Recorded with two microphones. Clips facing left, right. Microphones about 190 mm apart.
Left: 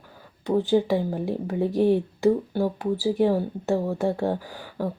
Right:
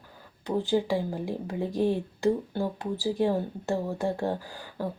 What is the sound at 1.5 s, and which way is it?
Speech, 15° left (ahead or behind).